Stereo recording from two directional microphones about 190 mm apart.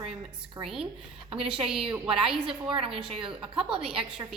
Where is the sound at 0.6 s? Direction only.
5° right (ahead or behind).